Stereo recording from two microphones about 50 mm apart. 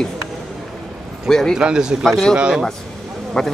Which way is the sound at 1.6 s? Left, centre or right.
Centre.